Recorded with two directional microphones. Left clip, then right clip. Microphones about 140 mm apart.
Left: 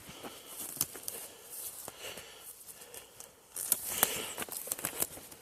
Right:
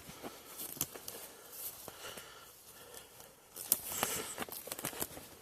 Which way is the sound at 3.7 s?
20° left (ahead or behind).